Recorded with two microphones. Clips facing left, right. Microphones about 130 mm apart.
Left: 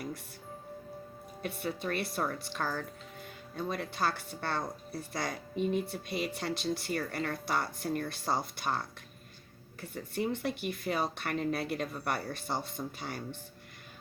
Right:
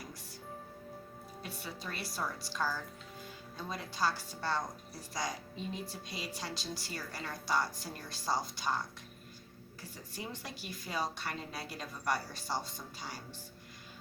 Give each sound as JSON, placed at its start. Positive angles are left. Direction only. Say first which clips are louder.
{"t": 1.4, "sound": "a woman's voice", "louder": "left 9 dB", "side_deg": 55}